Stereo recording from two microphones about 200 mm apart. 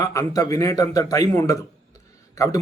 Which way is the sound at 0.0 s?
15° left (ahead or behind).